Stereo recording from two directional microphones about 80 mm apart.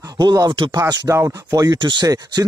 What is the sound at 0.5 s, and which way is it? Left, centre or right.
Speech, right.